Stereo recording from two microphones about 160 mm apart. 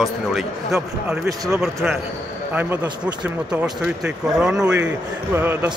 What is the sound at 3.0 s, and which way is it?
Speech, 5° right (ahead or behind).